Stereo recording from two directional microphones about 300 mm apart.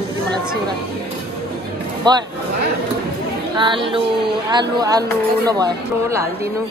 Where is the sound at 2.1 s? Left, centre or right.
Centre.